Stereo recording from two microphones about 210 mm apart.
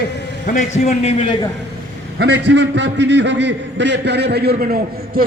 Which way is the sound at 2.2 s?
55° right (ahead or behind).